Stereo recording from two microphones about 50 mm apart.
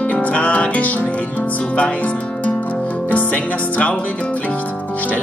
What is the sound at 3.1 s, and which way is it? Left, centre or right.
Music, left.